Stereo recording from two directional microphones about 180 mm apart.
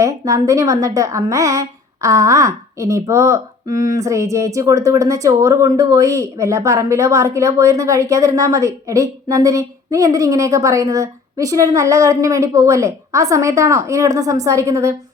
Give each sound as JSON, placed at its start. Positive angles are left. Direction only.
{"t": 0.0, "sound": "a woman's voice", "side_deg": -20}